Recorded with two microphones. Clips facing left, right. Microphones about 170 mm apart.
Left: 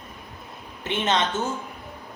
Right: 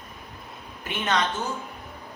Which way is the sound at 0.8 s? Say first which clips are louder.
Left 2 dB; 25° left (ahead or behind).